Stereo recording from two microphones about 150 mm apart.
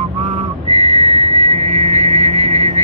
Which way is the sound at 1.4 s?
55° right (ahead or behind).